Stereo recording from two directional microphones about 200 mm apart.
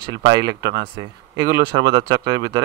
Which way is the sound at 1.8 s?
60° right (ahead or behind).